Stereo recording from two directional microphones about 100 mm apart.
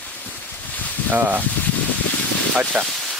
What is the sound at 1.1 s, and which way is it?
Speech, 20° right (ahead or behind).